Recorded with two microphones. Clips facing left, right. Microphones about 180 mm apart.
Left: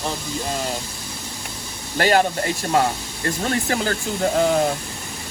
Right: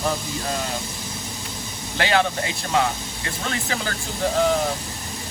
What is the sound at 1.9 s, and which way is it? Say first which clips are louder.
Speech: left 3 dB; 45° left (ahead or behind).